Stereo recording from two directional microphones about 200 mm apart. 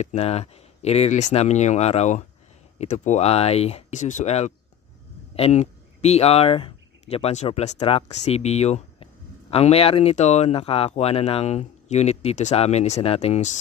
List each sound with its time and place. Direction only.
0.0 s speech: 35° left (ahead or behind)